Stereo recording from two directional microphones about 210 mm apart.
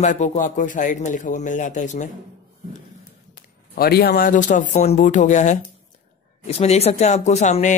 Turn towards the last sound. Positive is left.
turn(degrees=35)  # may be behind; listen again after turning